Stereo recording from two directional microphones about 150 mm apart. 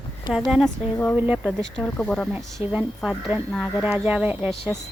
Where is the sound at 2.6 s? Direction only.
10° right (ahead or behind).